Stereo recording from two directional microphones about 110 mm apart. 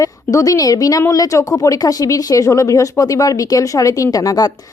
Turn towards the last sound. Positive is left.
turn(degrees=35)  # may be behind; listen again after turning